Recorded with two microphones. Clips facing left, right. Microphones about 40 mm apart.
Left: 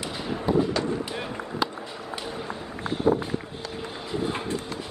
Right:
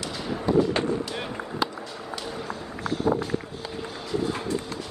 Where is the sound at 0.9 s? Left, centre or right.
Centre.